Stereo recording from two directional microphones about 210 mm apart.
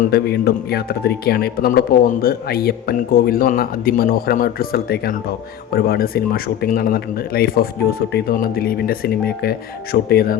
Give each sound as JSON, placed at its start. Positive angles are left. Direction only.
{"t": 0.1, "sound": "speech", "side_deg": 50}